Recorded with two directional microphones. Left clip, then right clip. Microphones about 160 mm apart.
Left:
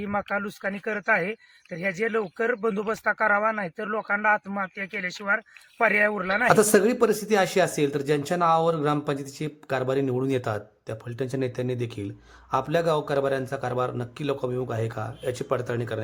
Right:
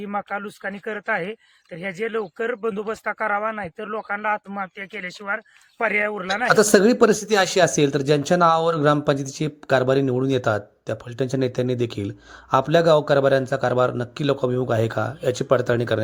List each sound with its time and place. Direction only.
0.1 s speech: 15° right (ahead or behind); by 16.0 s 35° right (ahead or behind)